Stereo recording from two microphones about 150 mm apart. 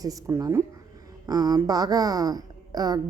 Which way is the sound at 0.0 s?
20° right (ahead or behind).